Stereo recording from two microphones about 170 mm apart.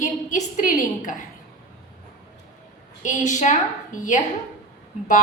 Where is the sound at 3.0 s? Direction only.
45° left (ahead or behind).